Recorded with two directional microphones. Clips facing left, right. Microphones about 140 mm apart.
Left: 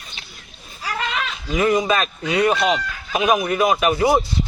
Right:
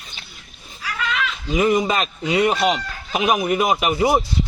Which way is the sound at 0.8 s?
40° left (ahead or behind).